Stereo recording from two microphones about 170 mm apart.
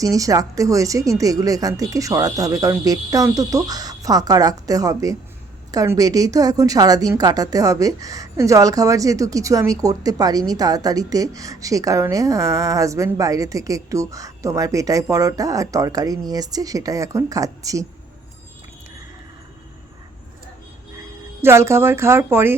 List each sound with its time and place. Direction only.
0.0 s a woman's voice: 20° right (ahead or behind)
21.4 s speech: 15° right (ahead or behind)